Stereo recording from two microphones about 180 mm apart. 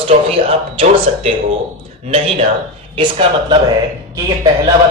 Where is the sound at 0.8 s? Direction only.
30° right (ahead or behind).